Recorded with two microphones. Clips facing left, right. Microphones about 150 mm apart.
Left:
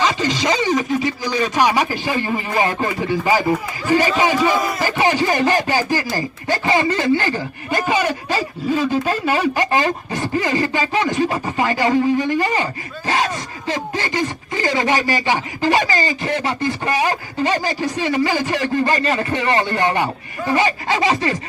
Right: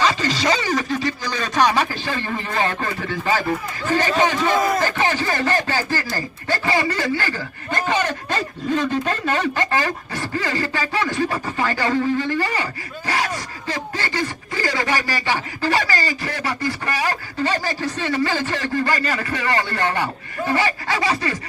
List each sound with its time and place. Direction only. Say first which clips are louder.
0.0 s a sound: left 1 dB; 15° left (ahead or behind)
0.9 s speech: left 3 dB; 20° left (ahead or behind)
7.8 s speech: left 2 dB; 10° left (ahead or behind)